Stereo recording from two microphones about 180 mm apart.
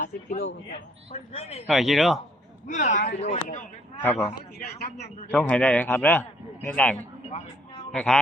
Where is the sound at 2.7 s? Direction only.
45° left (ahead or behind).